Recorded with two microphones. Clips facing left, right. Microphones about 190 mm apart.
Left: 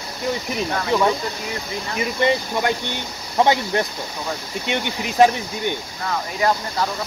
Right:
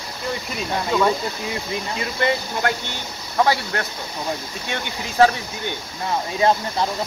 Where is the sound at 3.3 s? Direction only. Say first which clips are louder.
Left 2 dB; 20° left (ahead or behind).